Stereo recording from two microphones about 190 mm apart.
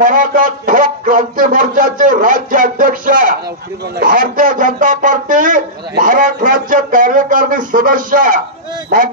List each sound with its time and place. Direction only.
0.0 s speech: 45° right (ahead or behind)